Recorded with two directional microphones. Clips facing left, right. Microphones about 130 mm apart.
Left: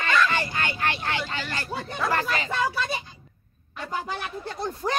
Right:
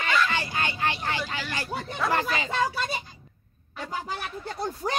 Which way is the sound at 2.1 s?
20° right (ahead or behind).